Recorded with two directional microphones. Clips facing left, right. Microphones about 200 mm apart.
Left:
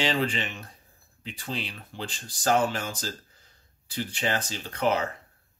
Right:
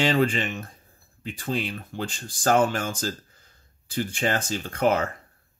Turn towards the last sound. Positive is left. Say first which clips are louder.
# right 3 dB
turn(degrees=-50)  # may be behind; listen again after turning